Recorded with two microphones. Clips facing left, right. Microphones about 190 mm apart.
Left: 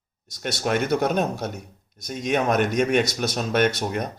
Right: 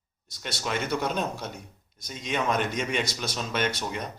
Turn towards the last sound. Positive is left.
turn(degrees=55)  # may be behind; listen again after turning